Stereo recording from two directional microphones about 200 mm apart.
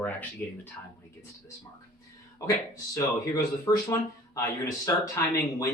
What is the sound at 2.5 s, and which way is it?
Speech, 15° left (ahead or behind).